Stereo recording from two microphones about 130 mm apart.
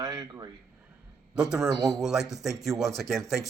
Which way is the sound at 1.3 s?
5° right (ahead or behind).